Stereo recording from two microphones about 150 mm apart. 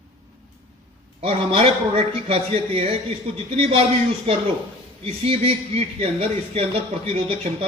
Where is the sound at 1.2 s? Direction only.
40° right (ahead or behind).